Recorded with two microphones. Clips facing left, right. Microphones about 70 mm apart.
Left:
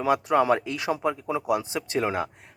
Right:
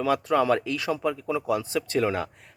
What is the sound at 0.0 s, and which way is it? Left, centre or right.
Speech, left.